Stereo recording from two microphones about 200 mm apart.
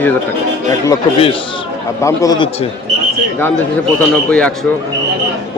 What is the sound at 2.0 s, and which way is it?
Speech, 15° left (ahead or behind).